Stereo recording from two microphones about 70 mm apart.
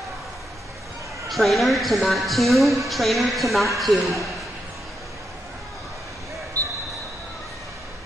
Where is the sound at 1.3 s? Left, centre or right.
Centre.